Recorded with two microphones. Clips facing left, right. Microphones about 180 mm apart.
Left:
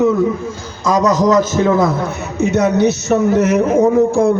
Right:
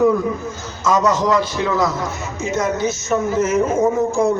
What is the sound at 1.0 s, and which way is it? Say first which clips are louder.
Speech: left 4 dB; 40° left (ahead or behind).